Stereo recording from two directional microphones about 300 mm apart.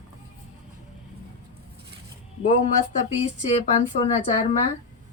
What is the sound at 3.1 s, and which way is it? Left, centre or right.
Speech, right.